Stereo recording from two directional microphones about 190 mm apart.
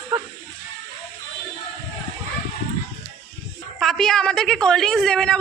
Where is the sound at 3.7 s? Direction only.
Centre (ahead or behind).